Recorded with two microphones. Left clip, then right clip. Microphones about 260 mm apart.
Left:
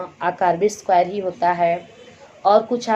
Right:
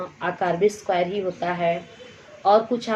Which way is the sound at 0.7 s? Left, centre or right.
Centre.